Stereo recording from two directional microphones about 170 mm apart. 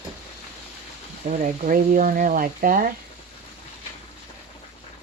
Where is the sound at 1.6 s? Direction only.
50° right (ahead or behind).